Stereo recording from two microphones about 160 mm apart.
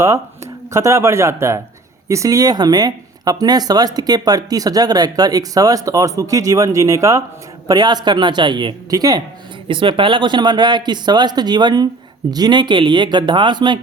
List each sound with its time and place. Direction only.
0.7 s speech: 20° right (ahead or behind)